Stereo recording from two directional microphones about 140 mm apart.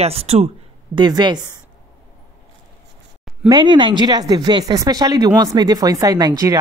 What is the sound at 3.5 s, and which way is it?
Speech, 35° right (ahead or behind).